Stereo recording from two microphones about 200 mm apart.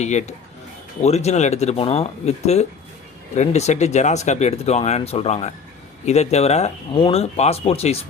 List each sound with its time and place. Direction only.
0.0 s speech: 35° left (ahead or behind)